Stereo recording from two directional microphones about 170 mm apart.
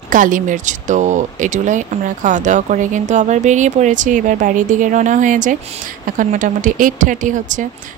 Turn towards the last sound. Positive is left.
turn(degrees=-50)  # may be behind; listen again after turning